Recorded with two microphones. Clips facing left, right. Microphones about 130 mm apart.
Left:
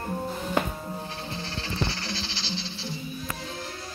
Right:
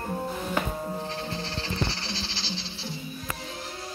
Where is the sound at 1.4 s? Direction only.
35° right (ahead or behind).